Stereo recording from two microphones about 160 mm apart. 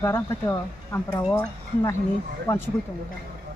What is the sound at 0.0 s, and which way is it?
Speech, 20° left (ahead or behind).